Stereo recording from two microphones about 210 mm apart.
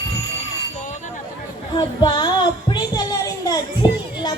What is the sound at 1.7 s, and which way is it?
Child singing, 20° left (ahead or behind).